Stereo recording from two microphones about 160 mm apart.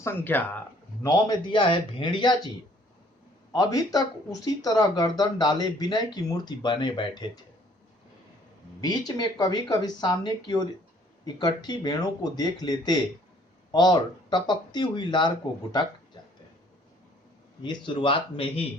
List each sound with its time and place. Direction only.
0.0 s speech: 15° left (ahead or behind)
1.0 s speech: 25° left (ahead or behind)
3.5 s speech: 25° left (ahead or behind)
8.8 s speech: 25° left (ahead or behind)
17.6 s speech: 30° left (ahead or behind)